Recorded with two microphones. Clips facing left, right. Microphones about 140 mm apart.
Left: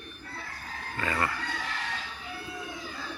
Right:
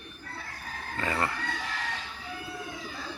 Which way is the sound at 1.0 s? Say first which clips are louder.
Even; 25° right (ahead or behind).